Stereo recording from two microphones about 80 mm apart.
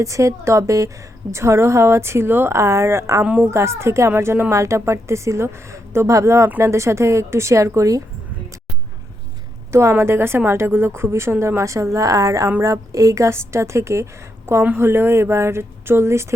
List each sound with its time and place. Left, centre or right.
0.0 s a woman's voice: right
10.0 s a woman's voice: right